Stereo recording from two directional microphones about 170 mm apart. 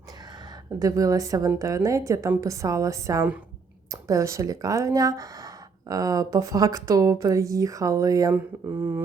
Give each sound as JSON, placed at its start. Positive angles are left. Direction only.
{"t": 0.8, "sound": "a woman's voice", "side_deg": -20}